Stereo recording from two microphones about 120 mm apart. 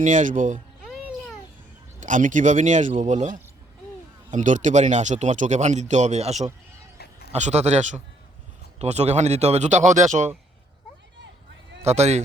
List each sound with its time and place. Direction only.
0.0 s speech: 90° right
2.0 s speech: 90° right
8.8 s speech: 65° right (ahead or behind); by 10.2 s 90° right
11.8 s a man's voice: 65° right (ahead or behind)